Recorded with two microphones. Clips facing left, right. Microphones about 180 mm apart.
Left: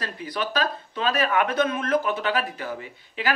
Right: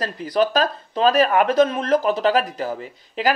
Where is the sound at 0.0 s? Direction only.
40° right (ahead or behind).